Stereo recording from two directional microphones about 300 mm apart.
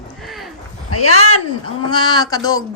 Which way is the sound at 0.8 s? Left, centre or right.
Left.